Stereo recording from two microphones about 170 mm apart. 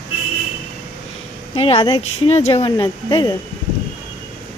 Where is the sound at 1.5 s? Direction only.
35° left (ahead or behind).